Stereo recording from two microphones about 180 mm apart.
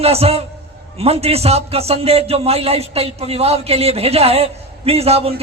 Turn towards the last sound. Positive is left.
turn(degrees=-35)  # may be behind; listen again after turning